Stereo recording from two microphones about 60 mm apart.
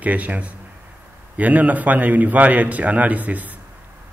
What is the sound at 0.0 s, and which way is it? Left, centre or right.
Speech, right.